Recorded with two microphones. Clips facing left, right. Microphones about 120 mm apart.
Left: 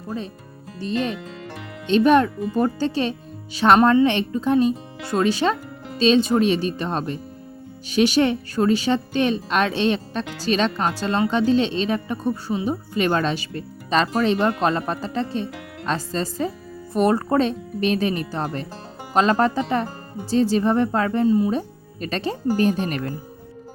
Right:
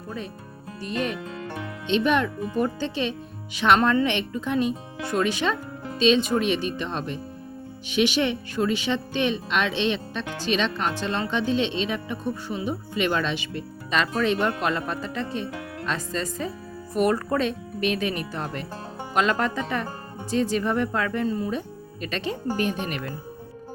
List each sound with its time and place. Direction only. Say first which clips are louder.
0.8 s a woman's voice: left 4 dB; 30° left (ahead or behind)
1.9 s a woman's voice: left 6 dB; 40° left (ahead or behind)
21.2 s speech: left 8 dB; 20° left (ahead or behind)
22.0 s a woman's voice: left 4 dB; 35° left (ahead or behind)